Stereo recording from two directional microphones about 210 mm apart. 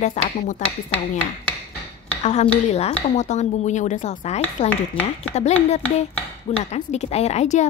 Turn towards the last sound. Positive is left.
turn(degrees=35)  # may be behind; listen again after turning